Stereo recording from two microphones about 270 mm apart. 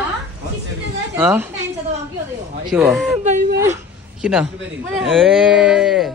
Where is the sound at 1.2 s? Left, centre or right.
Centre.